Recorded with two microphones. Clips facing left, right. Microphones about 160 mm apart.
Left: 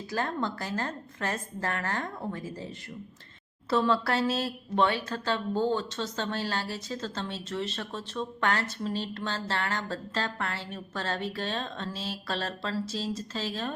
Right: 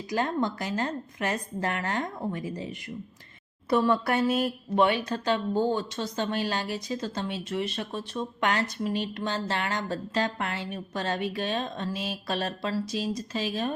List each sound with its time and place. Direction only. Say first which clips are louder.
0.1 s a woman's voice: right 4 dB; 15° right (ahead or behind)